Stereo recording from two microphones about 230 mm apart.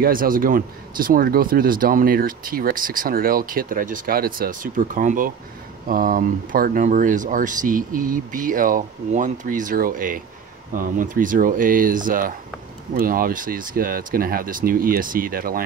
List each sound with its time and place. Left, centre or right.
0.0 s speech: right